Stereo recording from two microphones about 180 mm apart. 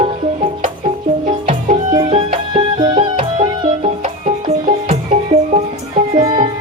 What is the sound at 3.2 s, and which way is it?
Music, 40° right (ahead or behind).